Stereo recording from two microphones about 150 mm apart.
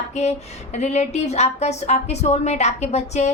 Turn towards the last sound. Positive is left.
turn(degrees=50)  # may be behind; listen again after turning